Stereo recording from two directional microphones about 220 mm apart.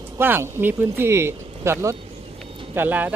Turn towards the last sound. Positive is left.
turn(degrees=-10)  # may be behind; listen again after turning